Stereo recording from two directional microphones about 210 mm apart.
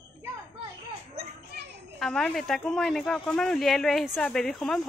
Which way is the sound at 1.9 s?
Centre (ahead or behind).